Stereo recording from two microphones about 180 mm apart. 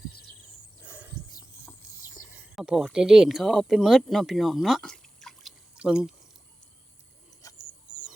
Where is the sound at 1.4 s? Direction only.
20° left (ahead or behind).